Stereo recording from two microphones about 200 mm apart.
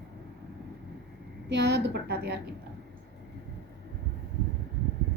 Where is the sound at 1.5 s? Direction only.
55° right (ahead or behind).